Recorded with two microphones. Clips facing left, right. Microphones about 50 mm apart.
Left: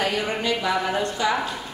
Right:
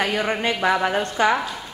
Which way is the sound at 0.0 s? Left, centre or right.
Right.